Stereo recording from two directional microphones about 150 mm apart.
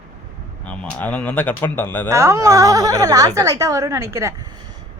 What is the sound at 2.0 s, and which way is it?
A woman's voice, 20° right (ahead or behind).